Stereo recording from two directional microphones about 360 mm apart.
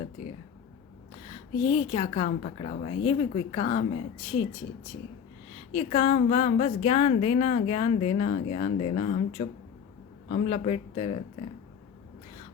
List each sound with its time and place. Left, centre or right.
1.3 s a woman's voice: centre